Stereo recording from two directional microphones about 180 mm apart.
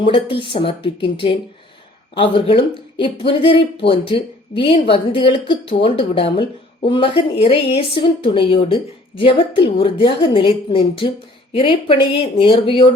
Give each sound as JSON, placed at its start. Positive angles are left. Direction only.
{"t": 0.0, "sound": "speech", "side_deg": 30}